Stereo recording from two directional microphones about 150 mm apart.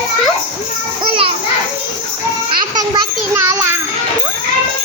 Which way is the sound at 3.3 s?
20° right (ahead or behind).